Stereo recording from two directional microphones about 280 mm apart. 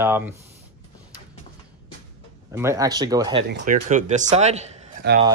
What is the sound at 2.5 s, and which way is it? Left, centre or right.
Speech, centre.